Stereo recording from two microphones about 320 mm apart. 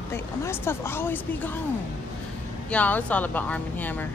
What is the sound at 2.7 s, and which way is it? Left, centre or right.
Speech, centre.